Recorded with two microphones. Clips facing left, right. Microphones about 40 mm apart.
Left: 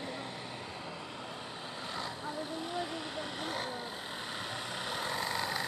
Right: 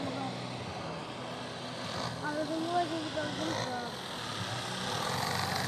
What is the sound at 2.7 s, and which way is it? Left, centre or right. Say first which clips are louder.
Vehicle: right 6 dB; centre.